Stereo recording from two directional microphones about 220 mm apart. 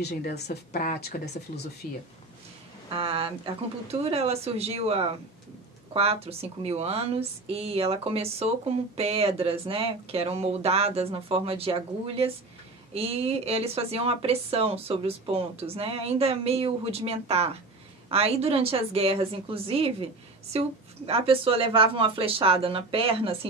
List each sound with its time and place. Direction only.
0.1 s speech: 45° left (ahead or behind)
2.9 s a woman's voice: 25° right (ahead or behind)